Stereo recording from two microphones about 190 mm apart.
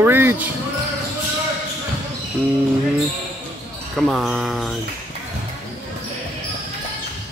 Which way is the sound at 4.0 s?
Centre (ahead or behind).